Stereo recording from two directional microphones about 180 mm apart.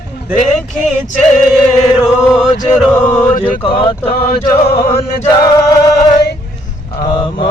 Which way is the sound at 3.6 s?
30° left (ahead or behind).